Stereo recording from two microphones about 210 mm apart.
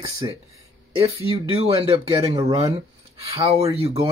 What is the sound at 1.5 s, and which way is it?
Speech, 30° right (ahead or behind).